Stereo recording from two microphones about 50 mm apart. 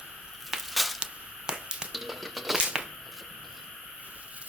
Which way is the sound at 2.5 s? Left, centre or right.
Centre.